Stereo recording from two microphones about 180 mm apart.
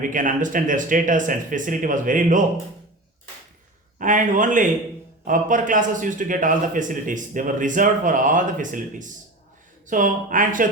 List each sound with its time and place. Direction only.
0.0 s a man's voice: 45° right (ahead or behind)
3.9 s a man's voice: 45° right (ahead or behind)